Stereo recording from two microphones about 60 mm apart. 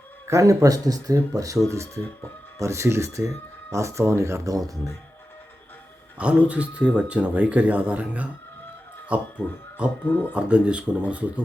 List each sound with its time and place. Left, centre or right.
0.3 s speech: right
6.1 s speech: right
10.0 s speech: left
10.3 s speech: centre